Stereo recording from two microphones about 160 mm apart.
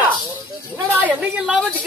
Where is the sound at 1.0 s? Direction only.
10° right (ahead or behind).